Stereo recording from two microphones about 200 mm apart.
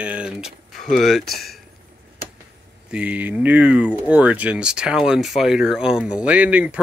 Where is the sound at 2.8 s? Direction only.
5° right (ahead or behind).